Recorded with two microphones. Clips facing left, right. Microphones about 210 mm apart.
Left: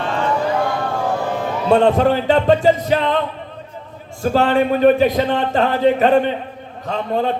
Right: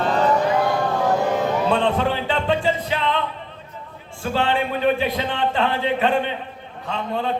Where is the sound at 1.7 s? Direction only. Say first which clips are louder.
Left 7 dB; 40° left (ahead or behind).